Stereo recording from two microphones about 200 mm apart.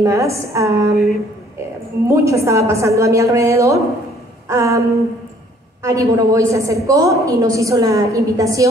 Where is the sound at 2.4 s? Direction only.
15° right (ahead or behind).